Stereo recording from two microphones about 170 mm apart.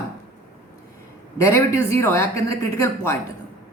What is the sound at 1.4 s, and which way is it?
Speech, 15° left (ahead or behind).